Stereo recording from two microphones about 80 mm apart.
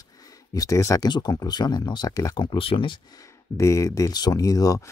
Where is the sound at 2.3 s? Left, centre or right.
Left.